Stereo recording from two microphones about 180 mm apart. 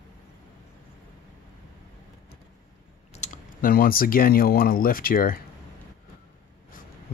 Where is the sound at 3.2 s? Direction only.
50° left (ahead or behind).